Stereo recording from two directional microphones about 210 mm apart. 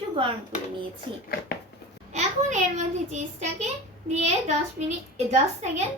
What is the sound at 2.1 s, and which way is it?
A woman's voice, 35° right (ahead or behind).